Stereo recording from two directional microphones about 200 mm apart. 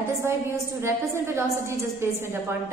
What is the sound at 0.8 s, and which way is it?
A woman's voice, 15° right (ahead or behind).